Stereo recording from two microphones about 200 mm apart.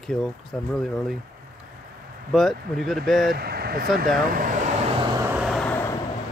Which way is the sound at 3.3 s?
50° right (ahead or behind).